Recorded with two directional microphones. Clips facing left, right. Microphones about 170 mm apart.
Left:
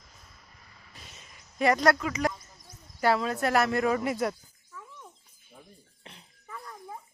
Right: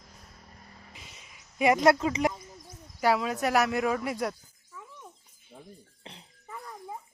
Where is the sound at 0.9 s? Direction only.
10° right (ahead or behind); by 2.4 s 25° right (ahead or behind).